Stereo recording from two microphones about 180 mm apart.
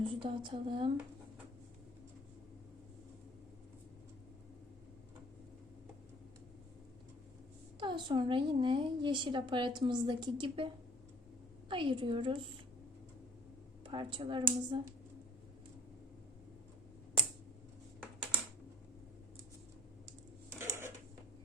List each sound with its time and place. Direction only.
0.0 s speech: 25° right (ahead or behind)
7.8 s speech: 25° right (ahead or behind)
11.7 s speech: 25° right (ahead or behind)
13.8 s speech: 25° right (ahead or behind)
20.5 s dishes: 15° right (ahead or behind)